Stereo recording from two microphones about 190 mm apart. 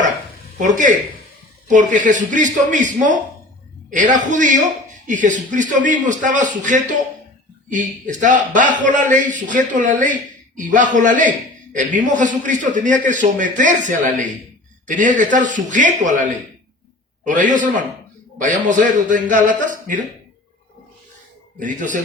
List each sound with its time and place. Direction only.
0.6 s a man's voice: 40° right (ahead or behind)
21.6 s a man's voice: 40° right (ahead or behind)